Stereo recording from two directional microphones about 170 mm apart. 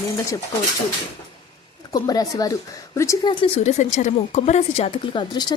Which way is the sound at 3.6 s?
45° left (ahead or behind).